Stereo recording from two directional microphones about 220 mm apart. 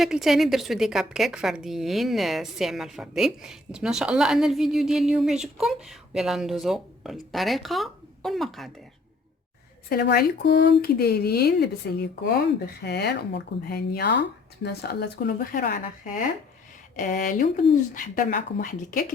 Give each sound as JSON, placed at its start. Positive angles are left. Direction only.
{"t": 0.0, "sound": "a woman's voice", "side_deg": 0}
{"t": 9.9, "sound": "speech", "side_deg": 45}
{"t": 17.0, "sound": "speech", "side_deg": 35}